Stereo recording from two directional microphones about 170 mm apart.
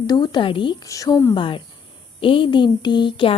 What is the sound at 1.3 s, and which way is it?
A woman's voice, 30° left (ahead or behind).